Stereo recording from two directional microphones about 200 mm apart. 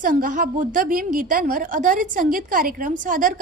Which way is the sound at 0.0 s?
40° right (ahead or behind).